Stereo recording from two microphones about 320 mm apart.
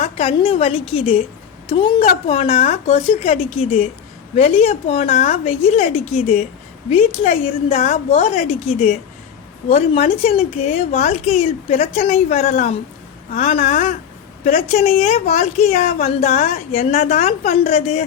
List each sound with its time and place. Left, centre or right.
0.0 s a woman's voice: centre